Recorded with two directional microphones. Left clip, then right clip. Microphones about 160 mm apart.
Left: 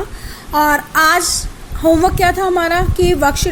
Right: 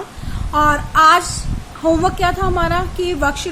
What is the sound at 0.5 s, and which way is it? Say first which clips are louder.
A woman's voice: left 1 dB; 20° left (ahead or behind).